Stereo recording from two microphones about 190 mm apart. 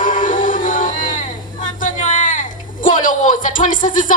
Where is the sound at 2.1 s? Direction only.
40° left (ahead or behind).